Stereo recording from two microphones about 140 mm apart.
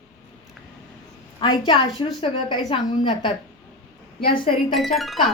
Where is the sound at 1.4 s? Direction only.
35° left (ahead or behind).